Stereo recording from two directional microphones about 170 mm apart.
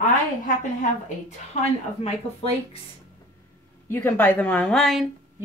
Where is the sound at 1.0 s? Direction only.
45° left (ahead or behind).